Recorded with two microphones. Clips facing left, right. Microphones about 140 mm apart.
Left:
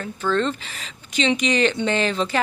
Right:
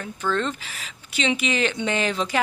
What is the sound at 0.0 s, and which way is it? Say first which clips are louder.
Speech: left 3 dB; 10° right (ahead or behind).